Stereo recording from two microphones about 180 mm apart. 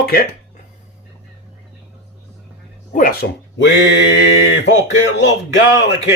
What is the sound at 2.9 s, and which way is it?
Speech, 50° left (ahead or behind).